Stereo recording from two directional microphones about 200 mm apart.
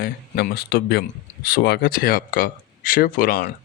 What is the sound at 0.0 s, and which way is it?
Speech, 50° left (ahead or behind).